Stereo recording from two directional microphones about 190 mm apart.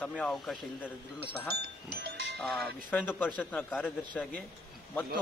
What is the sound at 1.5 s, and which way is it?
Speech, 60° right (ahead or behind).